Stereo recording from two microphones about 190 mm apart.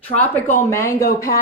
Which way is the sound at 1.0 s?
50° left (ahead or behind).